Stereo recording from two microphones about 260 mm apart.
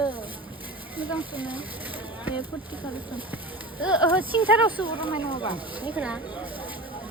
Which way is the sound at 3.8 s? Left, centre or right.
Centre.